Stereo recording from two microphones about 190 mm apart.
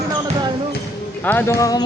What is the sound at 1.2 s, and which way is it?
Speech, 10° left (ahead or behind).